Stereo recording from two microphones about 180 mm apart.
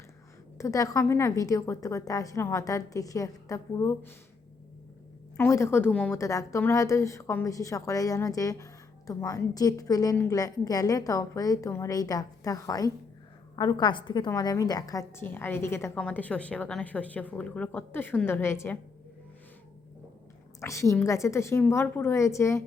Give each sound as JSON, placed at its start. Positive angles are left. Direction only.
{"t": 0.6, "sound": "a woman's voice", "side_deg": 20}
{"t": 5.4, "sound": "a woman's voice", "side_deg": 15}
{"t": 20.6, "sound": "a woman's voice", "side_deg": 15}